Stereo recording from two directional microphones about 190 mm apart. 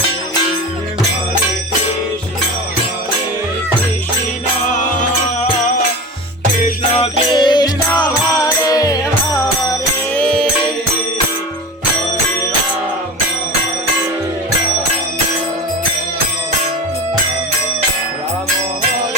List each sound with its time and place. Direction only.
7.0 s music: 25° left (ahead or behind)
10.2 s music: 5° left (ahead or behind)